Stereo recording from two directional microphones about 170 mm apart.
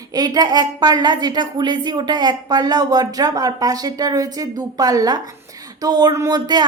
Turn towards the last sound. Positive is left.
turn(degrees=-25)  # may be behind; listen again after turning